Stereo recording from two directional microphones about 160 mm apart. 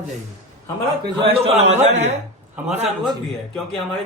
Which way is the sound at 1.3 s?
45° right (ahead or behind).